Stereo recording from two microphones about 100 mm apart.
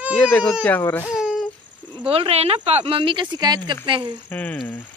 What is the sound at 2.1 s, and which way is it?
Speech, 80° right.